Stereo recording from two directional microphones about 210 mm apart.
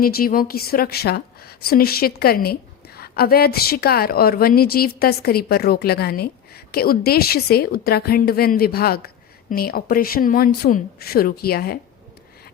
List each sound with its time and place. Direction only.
0.0 s a woman's voice: 45° left (ahead or behind)